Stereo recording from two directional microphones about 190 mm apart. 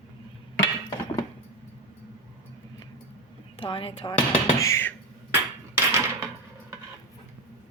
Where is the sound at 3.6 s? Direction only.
30° left (ahead or behind); by 4.9 s 15° left (ahead or behind).